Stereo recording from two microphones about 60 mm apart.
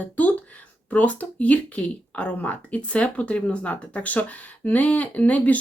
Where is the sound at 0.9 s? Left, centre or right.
Left.